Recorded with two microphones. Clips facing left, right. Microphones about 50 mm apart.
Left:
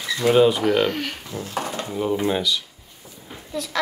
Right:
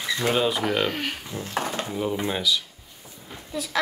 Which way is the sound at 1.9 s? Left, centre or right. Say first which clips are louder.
Left 7 dB; centre.